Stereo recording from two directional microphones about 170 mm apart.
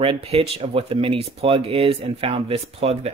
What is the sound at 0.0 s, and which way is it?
Speech, 35° right (ahead or behind).